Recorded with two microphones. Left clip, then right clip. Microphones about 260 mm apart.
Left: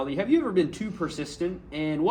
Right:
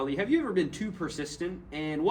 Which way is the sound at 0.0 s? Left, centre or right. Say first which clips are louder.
Left 3 dB; left.